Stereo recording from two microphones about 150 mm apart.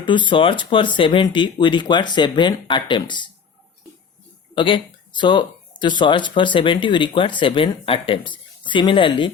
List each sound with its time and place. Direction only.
0.0 s speech: 30° left (ahead or behind)
4.5 s speech: 35° left (ahead or behind)